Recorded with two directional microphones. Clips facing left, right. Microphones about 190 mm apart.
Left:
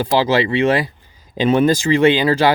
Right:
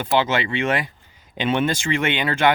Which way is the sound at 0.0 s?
35° left (ahead or behind).